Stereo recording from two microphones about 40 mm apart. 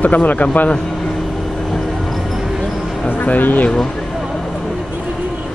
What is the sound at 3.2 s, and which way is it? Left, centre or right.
Speech, left.